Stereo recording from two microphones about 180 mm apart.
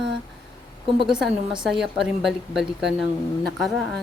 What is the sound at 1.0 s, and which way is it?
A woman's voice, centre (ahead or behind).